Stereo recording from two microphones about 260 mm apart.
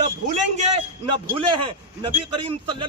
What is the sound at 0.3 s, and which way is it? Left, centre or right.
A man's voice, right.